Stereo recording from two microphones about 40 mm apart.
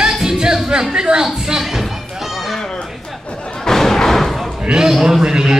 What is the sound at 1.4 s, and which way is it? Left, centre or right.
Music, centre.